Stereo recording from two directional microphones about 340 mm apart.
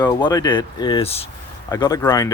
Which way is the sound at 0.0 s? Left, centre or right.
Centre.